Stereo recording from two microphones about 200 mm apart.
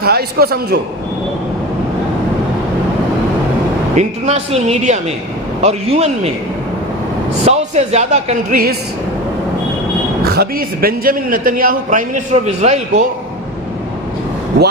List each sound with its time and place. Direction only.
0.0 s a man's voice: 50° right (ahead or behind)
3.9 s speech: 35° right (ahead or behind)
7.4 s speech: 35° right (ahead or behind)
10.2 s a man's voice: 50° right (ahead or behind)